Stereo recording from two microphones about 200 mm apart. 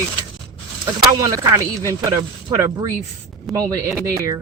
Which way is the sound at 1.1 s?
15° right (ahead or behind).